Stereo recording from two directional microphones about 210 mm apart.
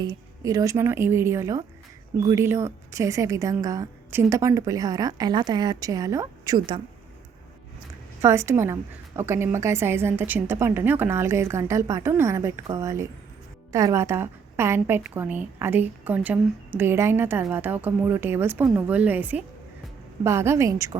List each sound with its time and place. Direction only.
0.0 s a woman's voice: 15° right (ahead or behind)
8.2 s a woman's voice: 15° right (ahead or behind)